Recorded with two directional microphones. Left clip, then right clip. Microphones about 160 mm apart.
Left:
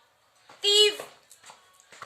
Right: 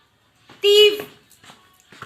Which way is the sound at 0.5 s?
20° left (ahead or behind).